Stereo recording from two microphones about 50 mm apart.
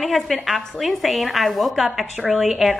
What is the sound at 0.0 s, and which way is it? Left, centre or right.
A woman's voice, centre.